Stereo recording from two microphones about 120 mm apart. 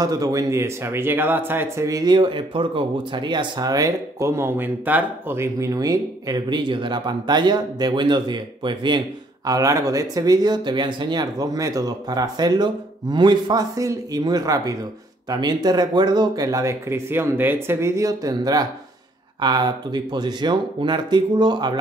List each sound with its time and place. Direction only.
0.0 s speech: 30° right (ahead or behind)
1.9 s speech: 35° right (ahead or behind)
9.5 s speech: 30° right (ahead or behind)